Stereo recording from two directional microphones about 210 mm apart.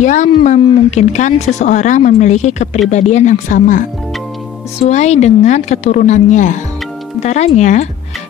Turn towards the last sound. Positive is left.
turn(degrees=35)  # may be behind; listen again after turning